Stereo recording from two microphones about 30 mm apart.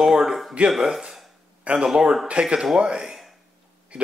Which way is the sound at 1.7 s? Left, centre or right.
Right.